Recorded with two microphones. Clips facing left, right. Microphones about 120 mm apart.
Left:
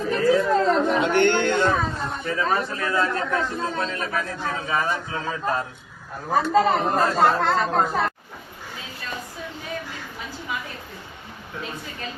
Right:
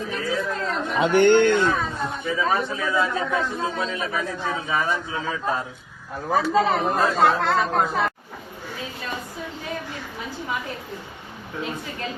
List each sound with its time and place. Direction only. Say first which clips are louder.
0.0 s speech: left 7 dB; centre (ahead or behind)